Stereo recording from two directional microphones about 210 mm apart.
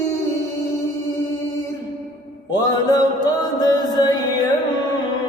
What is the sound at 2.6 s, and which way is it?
Music, 20° left (ahead or behind).